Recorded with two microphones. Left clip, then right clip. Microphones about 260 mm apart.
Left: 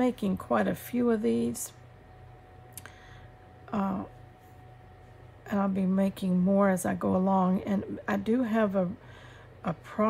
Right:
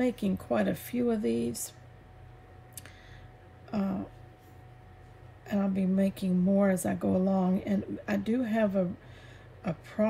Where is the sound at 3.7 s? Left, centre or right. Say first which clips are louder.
Left 3 dB; centre.